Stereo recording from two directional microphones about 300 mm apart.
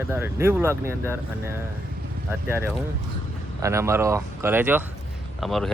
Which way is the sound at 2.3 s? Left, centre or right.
Centre.